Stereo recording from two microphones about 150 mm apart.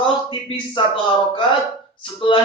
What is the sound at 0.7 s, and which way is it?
Speech, 35° left (ahead or behind).